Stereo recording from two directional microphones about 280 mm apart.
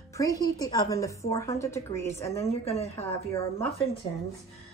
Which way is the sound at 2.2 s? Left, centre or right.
Left.